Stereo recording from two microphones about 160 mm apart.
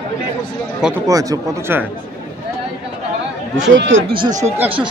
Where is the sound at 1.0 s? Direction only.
20° right (ahead or behind).